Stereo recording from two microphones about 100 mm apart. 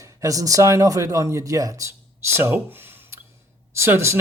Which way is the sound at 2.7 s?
20° right (ahead or behind).